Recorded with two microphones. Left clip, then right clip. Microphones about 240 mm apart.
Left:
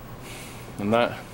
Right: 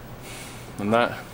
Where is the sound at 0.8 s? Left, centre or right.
Centre.